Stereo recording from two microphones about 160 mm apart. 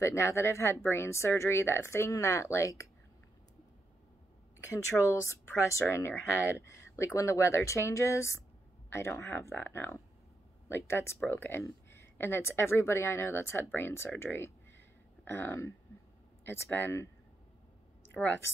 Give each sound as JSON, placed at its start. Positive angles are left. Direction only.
{"t": 0.0, "sound": "speech", "side_deg": 20}
{"t": 4.6, "sound": "speech", "side_deg": 20}
{"t": 18.1, "sound": "speech", "side_deg": 15}